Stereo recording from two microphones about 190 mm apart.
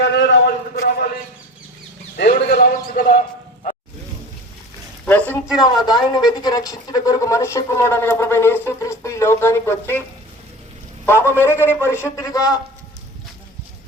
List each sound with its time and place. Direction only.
0.0 s a man's voice: 65° left (ahead or behind)
2.1 s a sound: 50° left (ahead or behind)
2.8 s speech: 50° left (ahead or behind)
5.0 s a sound: 10° left (ahead or behind)
5.5 s speech: 20° left (ahead or behind)
11.0 s speech: 10° left (ahead or behind)